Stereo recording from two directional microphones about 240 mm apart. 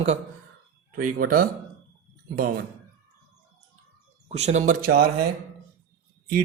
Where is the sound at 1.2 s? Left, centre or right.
Right.